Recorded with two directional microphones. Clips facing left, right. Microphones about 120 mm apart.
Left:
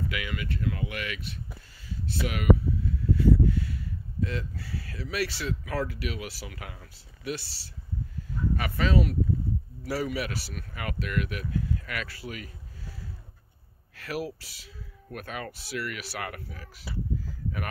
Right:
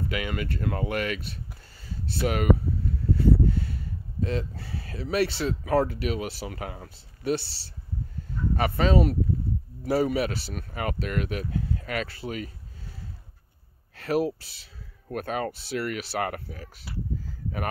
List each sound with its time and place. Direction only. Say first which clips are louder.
0.1 s speech: right 4 dB; 40° right (ahead or behind)
13.9 s speech: right 8 dB; 25° right (ahead or behind)